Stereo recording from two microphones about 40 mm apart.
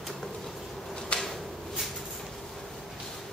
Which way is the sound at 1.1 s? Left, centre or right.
Left.